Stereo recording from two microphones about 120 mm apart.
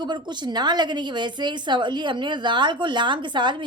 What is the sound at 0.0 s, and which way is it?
A woman's voice, 40° right (ahead or behind).